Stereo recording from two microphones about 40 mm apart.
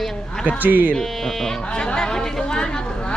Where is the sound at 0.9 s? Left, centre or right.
Centre.